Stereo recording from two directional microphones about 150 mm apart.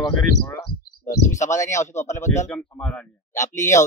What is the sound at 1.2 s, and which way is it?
Speech, 20° left (ahead or behind).